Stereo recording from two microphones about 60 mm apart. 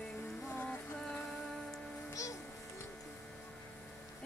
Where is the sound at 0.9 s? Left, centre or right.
Centre.